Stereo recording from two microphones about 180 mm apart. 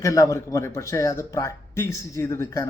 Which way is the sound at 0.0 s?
20° left (ahead or behind).